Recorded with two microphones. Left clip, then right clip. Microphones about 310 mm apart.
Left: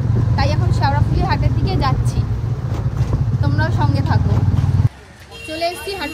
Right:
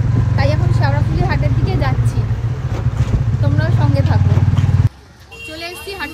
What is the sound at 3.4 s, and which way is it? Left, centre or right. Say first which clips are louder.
Vehicle: left 1 dB; centre.